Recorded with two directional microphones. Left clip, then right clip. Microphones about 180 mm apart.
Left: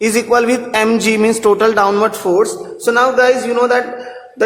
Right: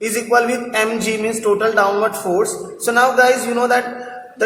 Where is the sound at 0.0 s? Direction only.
45° left (ahead or behind).